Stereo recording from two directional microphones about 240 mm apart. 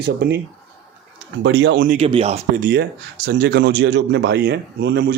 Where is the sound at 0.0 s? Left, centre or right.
Right.